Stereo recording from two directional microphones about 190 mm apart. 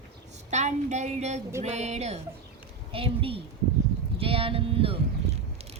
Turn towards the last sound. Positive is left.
turn(degrees=-30)  # may be behind; listen again after turning